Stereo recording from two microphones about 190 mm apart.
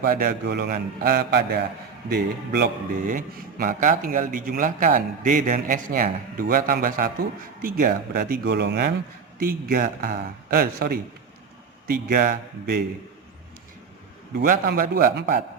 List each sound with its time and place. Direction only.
0.0 s speech: 50° right (ahead or behind)
3.0 s speech: 45° right (ahead or behind); by 8.9 s 65° right (ahead or behind)
9.4 s speech: 50° right (ahead or behind)
14.3 s speech: 50° right (ahead or behind)